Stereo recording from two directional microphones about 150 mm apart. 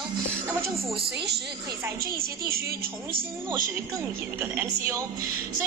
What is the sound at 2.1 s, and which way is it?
Speech, 90° right.